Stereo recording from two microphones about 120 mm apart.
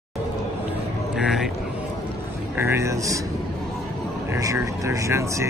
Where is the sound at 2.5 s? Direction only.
20° right (ahead or behind).